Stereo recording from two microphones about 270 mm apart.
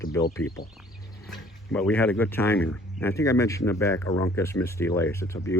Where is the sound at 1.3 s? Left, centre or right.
Centre.